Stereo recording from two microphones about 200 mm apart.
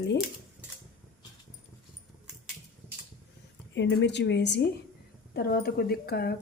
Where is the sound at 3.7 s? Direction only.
60° left (ahead or behind).